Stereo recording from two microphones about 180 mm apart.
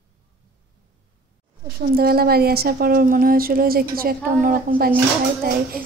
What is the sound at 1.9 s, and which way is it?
A woman's voice, 55° right (ahead or behind).